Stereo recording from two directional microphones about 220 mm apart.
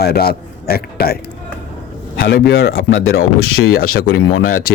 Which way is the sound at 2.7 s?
65° left (ahead or behind).